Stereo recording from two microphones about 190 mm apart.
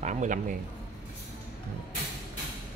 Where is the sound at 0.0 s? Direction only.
40° right (ahead or behind).